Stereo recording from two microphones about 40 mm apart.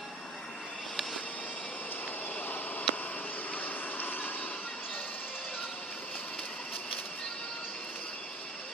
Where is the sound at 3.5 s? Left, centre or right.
Left.